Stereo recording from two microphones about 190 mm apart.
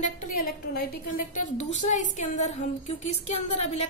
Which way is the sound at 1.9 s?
40° left (ahead or behind).